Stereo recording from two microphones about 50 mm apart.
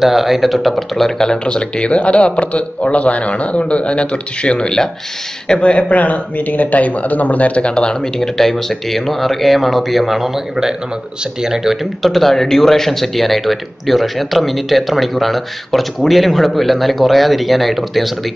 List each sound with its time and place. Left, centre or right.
0.0 s speech: centre